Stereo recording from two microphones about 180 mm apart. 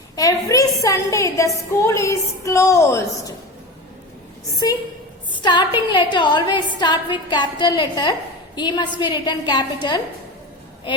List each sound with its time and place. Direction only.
0.2 s a woman's voice: 20° left (ahead or behind)
4.5 s a woman's voice: 20° left (ahead or behind)